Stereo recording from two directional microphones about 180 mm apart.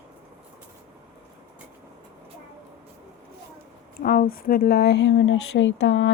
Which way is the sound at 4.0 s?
55° left (ahead or behind).